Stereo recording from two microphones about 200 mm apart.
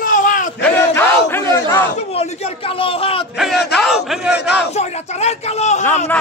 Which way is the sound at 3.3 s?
Centre (ahead or behind).